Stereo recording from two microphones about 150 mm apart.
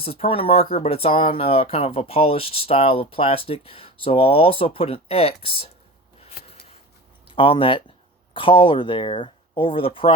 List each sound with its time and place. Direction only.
0.0 s speech: 40° left (ahead or behind)
7.3 s speech: 35° left (ahead or behind)